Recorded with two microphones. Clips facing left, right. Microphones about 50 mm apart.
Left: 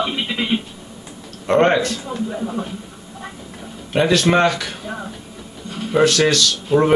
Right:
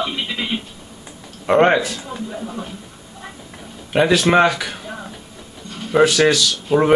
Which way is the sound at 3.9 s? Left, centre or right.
Centre.